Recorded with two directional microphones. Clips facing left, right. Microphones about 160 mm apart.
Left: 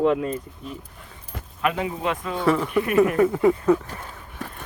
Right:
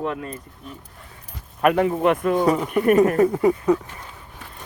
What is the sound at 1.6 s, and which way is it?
A woman's voice, 55° right (ahead or behind).